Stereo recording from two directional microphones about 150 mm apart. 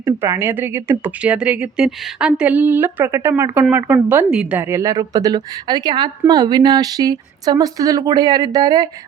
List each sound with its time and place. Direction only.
0.0 s speech: 15° right (ahead or behind)